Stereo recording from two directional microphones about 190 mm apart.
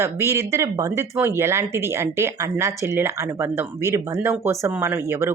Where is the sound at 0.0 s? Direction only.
15° right (ahead or behind).